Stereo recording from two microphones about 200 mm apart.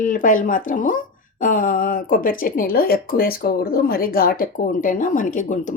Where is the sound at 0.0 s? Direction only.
40° left (ahead or behind).